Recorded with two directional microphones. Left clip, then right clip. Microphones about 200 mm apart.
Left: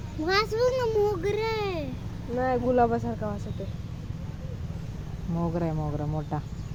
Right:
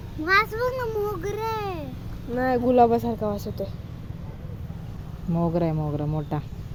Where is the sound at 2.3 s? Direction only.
60° right (ahead or behind).